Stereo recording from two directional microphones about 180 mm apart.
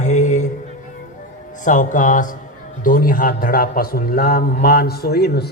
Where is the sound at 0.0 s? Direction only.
40° left (ahead or behind).